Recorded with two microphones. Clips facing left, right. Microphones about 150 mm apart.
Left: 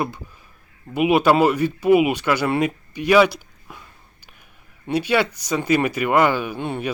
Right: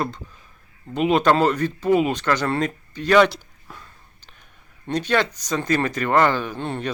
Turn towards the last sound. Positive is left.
turn(degrees=10)  # may be behind; listen again after turning